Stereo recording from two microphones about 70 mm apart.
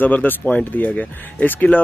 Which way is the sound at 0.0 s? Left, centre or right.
Left.